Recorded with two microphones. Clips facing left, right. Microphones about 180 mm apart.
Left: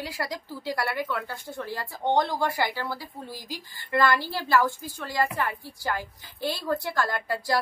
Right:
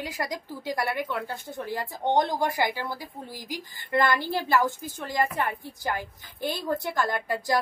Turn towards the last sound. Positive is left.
turn(degrees=-20)  # may be behind; listen again after turning